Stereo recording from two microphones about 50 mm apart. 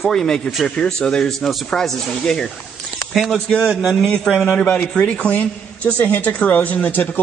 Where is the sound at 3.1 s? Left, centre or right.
Centre.